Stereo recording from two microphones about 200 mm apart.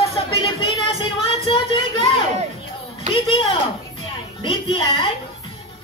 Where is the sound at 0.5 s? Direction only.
25° left (ahead or behind).